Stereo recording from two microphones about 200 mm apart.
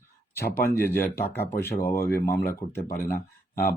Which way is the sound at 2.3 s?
50° left (ahead or behind).